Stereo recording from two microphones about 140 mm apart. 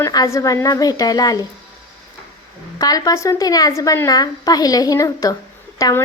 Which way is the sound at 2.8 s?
25° left (ahead or behind).